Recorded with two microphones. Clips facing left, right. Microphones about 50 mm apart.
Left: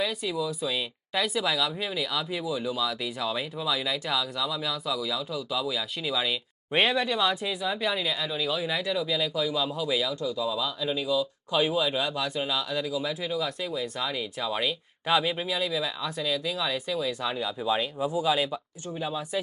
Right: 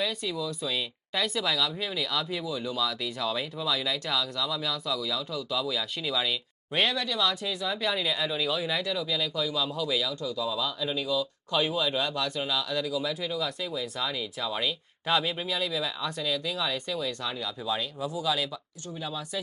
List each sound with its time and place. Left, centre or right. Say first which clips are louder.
0.0 s speech: left 2 dB; centre
6.7 s speech: left 3 dB; left
7.6 s speech: right 1 dB; centre
10.4 s speech: right 1 dB; centre
17.3 s speech: left 4 dB; centre